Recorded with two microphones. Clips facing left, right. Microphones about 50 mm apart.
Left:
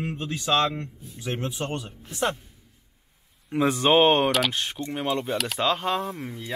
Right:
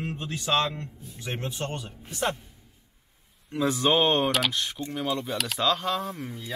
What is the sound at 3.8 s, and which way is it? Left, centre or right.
Speech, left.